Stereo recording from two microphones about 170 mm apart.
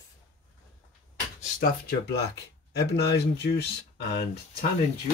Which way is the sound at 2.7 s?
75° left (ahead or behind).